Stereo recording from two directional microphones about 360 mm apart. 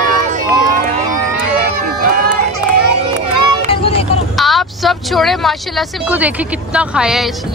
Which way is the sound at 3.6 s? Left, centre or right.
Centre.